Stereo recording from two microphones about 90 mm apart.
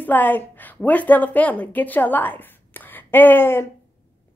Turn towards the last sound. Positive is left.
turn(degrees=25)  # may be behind; listen again after turning